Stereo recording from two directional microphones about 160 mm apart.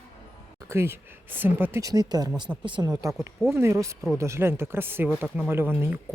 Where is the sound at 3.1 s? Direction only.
Centre (ahead or behind).